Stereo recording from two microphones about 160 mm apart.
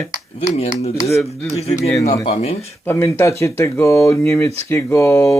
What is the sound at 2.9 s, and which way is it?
Speech, 15° left (ahead or behind).